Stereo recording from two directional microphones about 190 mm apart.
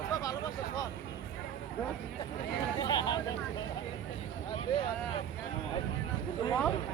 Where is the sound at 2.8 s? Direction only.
20° left (ahead or behind).